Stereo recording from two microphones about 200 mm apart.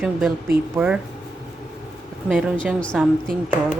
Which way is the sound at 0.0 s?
5° right (ahead or behind).